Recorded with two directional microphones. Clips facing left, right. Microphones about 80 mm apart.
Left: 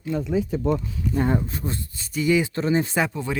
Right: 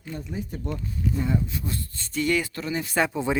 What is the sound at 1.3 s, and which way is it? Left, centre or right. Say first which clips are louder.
Speech: left 3 dB; left.